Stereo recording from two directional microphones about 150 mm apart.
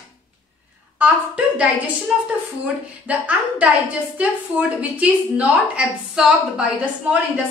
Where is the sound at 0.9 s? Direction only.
10° right (ahead or behind).